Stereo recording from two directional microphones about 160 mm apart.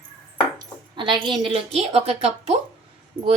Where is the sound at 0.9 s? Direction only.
30° right (ahead or behind).